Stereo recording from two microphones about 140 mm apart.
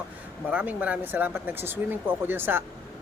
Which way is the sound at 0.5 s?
10° right (ahead or behind).